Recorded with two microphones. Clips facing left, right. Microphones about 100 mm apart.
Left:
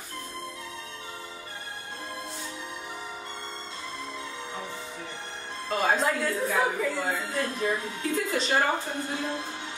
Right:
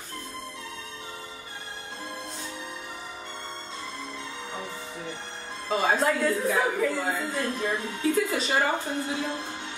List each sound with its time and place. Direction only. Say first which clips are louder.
5.7 s a woman's voice: right 1 dB; centre (ahead or behind)